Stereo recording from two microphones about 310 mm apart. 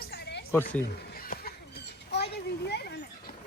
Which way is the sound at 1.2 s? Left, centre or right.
Left.